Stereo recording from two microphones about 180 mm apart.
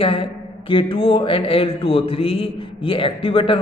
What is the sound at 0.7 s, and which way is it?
A man's voice, 30° left (ahead or behind).